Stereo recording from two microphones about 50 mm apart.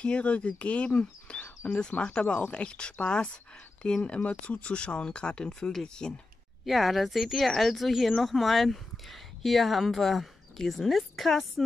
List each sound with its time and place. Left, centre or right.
0.0 s speech: left
5.5 s speech: centre
6.6 s speech: centre